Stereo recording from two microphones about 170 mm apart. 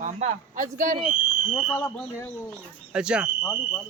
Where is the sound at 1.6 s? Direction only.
15° left (ahead or behind).